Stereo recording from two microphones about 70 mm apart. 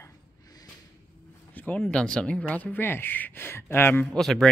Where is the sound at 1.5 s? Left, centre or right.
Left.